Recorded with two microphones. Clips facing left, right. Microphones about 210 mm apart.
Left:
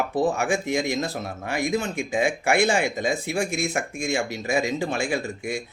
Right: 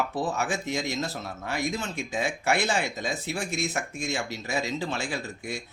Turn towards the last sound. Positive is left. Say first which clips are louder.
# left 6 dB
turn(degrees=10)  # may be behind; listen again after turning